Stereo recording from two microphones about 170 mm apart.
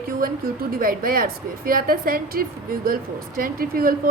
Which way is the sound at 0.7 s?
55° right (ahead or behind).